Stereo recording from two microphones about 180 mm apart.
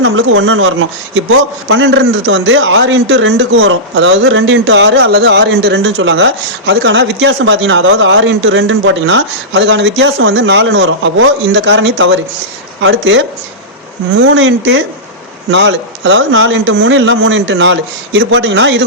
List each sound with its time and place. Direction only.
0.0 s speech: 90° right